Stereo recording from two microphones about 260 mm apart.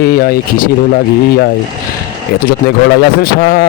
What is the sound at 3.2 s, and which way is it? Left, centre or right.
Speech, left.